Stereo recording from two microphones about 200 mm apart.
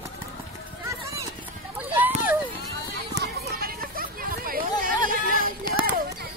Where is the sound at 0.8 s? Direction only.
15° right (ahead or behind).